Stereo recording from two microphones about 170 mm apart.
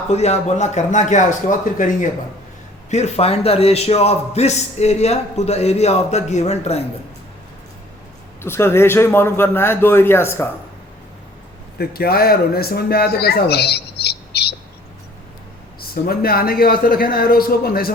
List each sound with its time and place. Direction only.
0.1 s speech: 40° left (ahead or behind)
2.9 s a man's voice: 40° left (ahead or behind)
8.4 s a man's voice: 15° left (ahead or behind)
11.8 s speech: 65° left (ahead or behind)
16.0 s speech: 65° left (ahead or behind)